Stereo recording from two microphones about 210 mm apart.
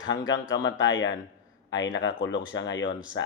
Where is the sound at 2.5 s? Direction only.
60° left (ahead or behind).